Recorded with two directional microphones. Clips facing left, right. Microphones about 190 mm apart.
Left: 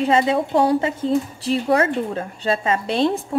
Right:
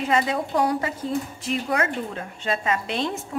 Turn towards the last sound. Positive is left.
turn(degrees=35)  # may be behind; listen again after turning